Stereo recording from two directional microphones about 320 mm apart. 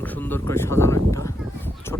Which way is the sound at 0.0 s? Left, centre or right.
Centre.